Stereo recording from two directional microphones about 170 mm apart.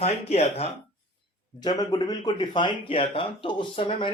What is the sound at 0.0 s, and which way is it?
Speech, 40° left (ahead or behind).